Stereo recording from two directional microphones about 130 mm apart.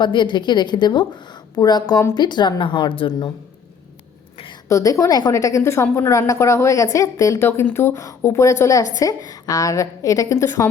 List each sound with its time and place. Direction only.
0.0 s a woman's voice: 35° left (ahead or behind)
4.7 s a woman's voice: 25° left (ahead or behind)